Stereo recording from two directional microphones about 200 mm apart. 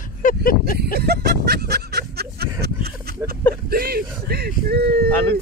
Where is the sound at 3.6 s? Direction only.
50° right (ahead or behind).